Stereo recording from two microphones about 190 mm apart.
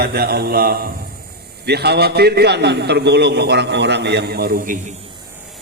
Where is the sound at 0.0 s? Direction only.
55° right (ahead or behind).